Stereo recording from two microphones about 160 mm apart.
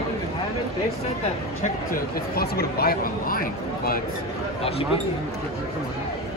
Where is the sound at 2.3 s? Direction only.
70° left (ahead or behind).